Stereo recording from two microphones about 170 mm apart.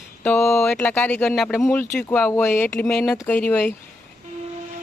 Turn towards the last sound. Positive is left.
turn(degrees=10)  # may be behind; listen again after turning